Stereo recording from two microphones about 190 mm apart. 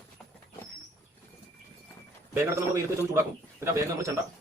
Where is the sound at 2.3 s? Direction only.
15° right (ahead or behind).